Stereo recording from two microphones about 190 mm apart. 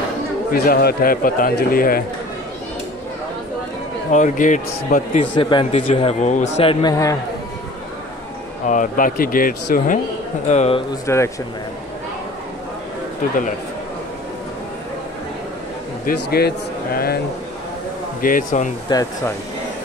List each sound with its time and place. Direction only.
0.5 s speech: 50° left (ahead or behind)
4.1 s a man's voice: 40° left (ahead or behind)
5.2 s a man's voice: 25° left (ahead or behind)
8.6 s speech: 45° left (ahead or behind)
10.5 s a man's voice: 35° left (ahead or behind)
11.1 s speech: 15° left (ahead or behind)
16.1 s speech: 55° left (ahead or behind)
18.2 s speech: 45° left (ahead or behind)
18.9 s a man's voice: 20° left (ahead or behind)